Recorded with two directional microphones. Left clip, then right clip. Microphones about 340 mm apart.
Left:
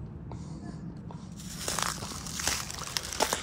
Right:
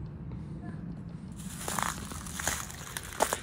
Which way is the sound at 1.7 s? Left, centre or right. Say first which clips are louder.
Left 1 dB; centre.